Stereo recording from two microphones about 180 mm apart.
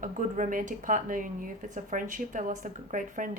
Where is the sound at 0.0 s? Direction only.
45° right (ahead or behind).